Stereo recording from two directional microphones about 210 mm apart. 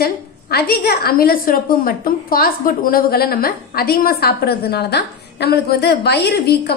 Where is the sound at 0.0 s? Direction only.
45° left (ahead or behind).